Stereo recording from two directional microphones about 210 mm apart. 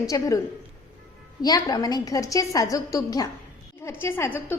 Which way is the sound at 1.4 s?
20° left (ahead or behind).